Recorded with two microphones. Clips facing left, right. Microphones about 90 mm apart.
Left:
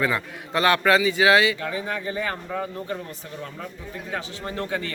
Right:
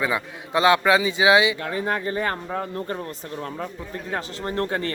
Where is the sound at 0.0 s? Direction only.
15° right (ahead or behind).